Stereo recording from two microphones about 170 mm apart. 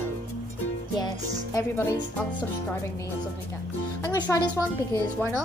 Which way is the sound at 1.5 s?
15° left (ahead or behind).